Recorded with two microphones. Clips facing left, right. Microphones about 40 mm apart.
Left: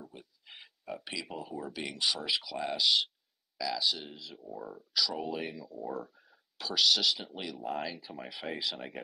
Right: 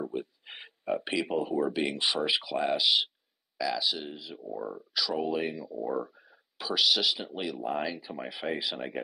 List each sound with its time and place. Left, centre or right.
0.0 s speech: right; by 9.0 s centre